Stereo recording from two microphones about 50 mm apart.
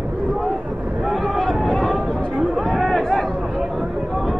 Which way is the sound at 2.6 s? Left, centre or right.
Centre.